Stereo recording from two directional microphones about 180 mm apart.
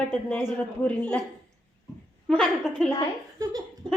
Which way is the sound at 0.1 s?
10° left (ahead or behind).